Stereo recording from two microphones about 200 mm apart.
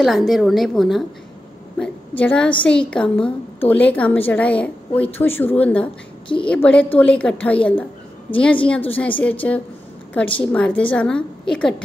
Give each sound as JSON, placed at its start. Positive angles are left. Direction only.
{"t": 0.0, "sound": "a woman's voice", "side_deg": 0}
{"t": 6.2, "sound": "a woman's voice", "side_deg": 25}
{"t": 6.5, "sound": "a woman's voice", "side_deg": 5}